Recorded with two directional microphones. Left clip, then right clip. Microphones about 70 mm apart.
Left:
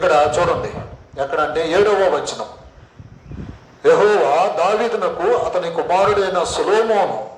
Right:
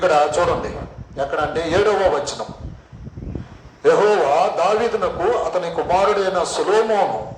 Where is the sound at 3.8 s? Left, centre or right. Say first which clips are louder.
Left 2 dB; left.